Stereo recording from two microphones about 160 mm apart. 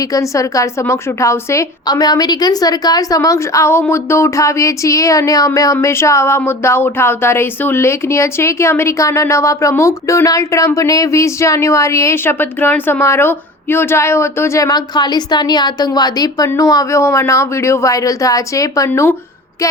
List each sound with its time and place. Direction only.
0.0 s a woman's voice: 20° left (ahead or behind)